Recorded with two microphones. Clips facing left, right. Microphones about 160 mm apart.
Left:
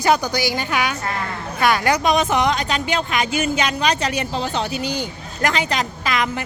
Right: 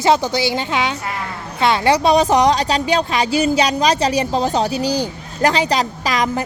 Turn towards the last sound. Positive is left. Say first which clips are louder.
# right 3 dB
turn(degrees=-35)  # may be behind; listen again after turning